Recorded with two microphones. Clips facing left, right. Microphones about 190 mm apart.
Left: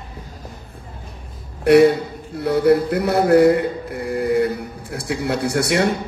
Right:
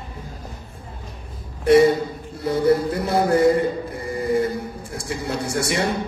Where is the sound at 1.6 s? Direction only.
65° left (ahead or behind).